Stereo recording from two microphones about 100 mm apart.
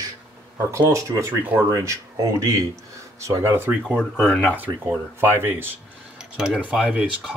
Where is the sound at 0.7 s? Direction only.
30° right (ahead or behind).